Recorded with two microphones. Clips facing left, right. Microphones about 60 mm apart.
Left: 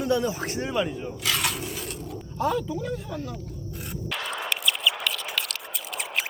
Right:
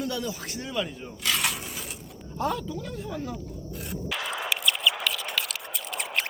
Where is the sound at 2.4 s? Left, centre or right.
Centre.